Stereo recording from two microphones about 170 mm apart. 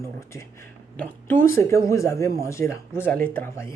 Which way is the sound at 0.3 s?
10° left (ahead or behind).